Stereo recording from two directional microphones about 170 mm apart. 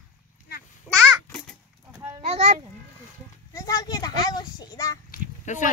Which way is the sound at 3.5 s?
20° left (ahead or behind).